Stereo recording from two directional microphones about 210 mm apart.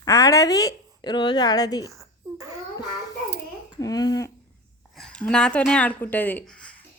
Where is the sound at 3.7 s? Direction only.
15° left (ahead or behind).